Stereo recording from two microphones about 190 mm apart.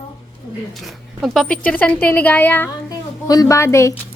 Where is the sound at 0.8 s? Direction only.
Centre (ahead or behind).